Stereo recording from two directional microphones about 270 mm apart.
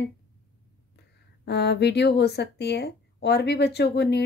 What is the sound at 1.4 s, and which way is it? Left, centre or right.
A woman's voice, left.